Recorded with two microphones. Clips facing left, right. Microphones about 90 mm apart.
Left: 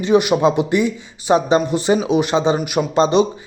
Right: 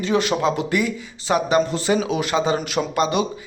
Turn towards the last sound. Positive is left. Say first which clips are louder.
# left 6 dB
turn(degrees=30)  # may be behind; listen again after turning